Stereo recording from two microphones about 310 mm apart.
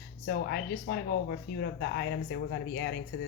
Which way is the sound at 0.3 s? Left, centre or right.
Left.